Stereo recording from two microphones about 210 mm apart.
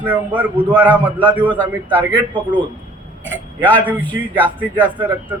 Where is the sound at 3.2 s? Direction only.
10° left (ahead or behind).